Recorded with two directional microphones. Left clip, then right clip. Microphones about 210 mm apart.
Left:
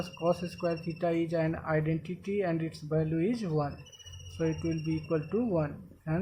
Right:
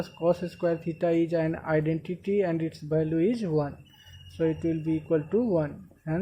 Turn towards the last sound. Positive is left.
turn(degrees=-20)  # may be behind; listen again after turning